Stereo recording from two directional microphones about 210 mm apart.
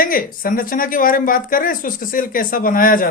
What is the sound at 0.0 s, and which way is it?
Speech, 40° left (ahead or behind).